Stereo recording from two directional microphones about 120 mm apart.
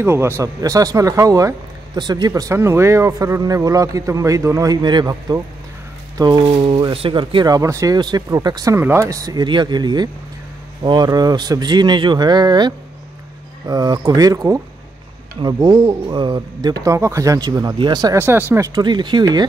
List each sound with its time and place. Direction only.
0.0 s speech: 20° right (ahead or behind)
8.7 s speech: 20° right (ahead or behind); by 18.1 s 40° right (ahead or behind)
18.1 s speech: 20° right (ahead or behind)
18.8 s speech: 40° right (ahead or behind)